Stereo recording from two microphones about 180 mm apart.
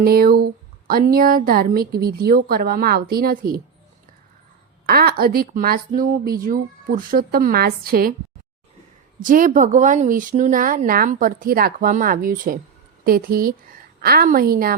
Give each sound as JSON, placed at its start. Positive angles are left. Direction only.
{"t": 0.0, "sound": "speech", "side_deg": -55}
{"t": 4.9, "sound": "speech", "side_deg": -60}
{"t": 9.2, "sound": "speech", "side_deg": -50}